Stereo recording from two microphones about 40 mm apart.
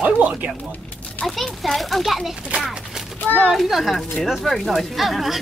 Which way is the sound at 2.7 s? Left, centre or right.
Centre.